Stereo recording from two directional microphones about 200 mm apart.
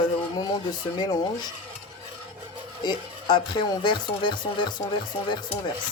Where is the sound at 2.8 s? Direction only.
20° left (ahead or behind).